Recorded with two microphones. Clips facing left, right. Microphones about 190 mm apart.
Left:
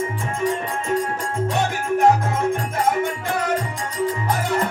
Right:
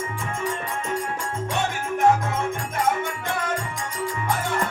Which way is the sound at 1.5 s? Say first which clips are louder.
Left 4 dB; 40° left (ahead or behind).